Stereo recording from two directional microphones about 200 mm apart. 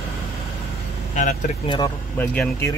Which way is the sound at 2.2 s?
10° left (ahead or behind).